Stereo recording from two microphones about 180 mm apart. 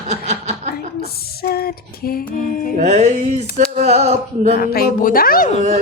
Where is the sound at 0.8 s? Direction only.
60° left (ahead or behind).